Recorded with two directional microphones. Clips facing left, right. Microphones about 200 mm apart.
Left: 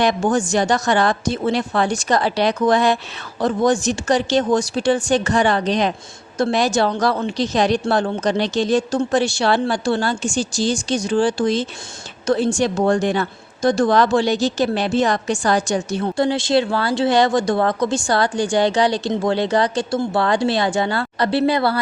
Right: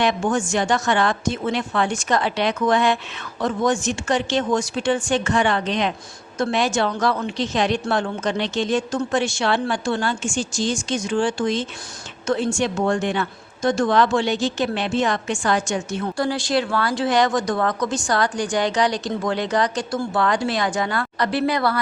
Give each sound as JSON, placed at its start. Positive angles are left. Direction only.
{"t": 0.0, "sound": "a woman's voice", "side_deg": 35}
{"t": 16.1, "sound": "speech", "side_deg": 25}